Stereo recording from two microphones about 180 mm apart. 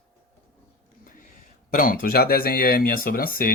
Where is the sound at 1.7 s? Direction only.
55° left (ahead or behind).